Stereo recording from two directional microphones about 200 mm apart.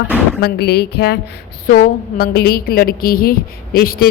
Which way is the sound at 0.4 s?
55° left (ahead or behind).